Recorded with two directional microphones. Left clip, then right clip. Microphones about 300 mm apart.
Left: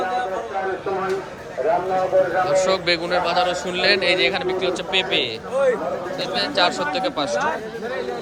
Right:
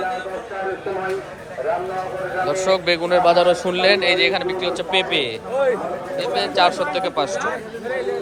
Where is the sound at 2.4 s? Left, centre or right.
Centre.